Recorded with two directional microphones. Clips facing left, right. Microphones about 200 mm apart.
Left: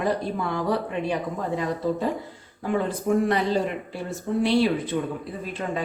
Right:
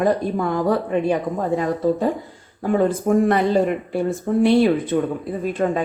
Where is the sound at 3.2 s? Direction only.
50° right (ahead or behind).